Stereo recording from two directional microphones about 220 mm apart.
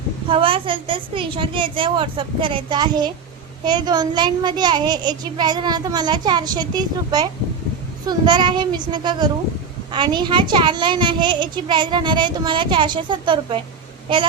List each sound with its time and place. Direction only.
0.3 s a child's voice: 25° right (ahead or behind)